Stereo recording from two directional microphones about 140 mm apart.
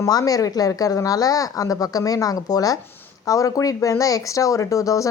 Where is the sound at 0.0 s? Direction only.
25° left (ahead or behind).